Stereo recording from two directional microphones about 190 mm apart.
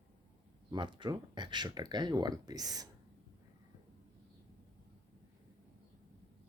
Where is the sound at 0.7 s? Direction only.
25° right (ahead or behind).